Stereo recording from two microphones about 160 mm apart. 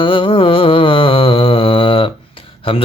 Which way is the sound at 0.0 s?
30° left (ahead or behind).